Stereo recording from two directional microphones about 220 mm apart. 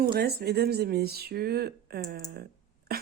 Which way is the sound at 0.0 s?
45° right (ahead or behind).